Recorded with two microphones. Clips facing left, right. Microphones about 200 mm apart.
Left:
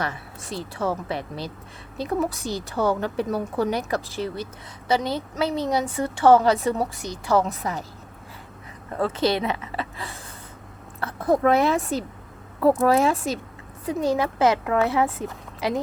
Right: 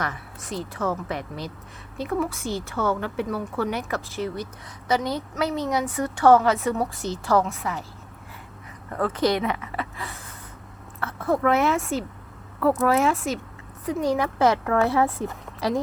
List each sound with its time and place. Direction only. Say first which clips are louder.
0.0 s a woman's voice: left 1 dB; 30° left (ahead or behind)
6.9 s speech: even; 15° left (ahead or behind)
7.4 s a woman's voice: left 1 dB; 40° left (ahead or behind)
8.9 s a woman's voice: even; 25° left (ahead or behind)
12.5 s speech: left 3 dB; 10° left (ahead or behind)
12.8 s a woman's voice: left 2 dB; 30° left (ahead or behind)